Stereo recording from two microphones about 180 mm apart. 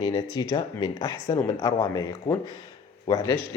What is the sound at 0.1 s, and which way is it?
Speech, 25° left (ahead or behind).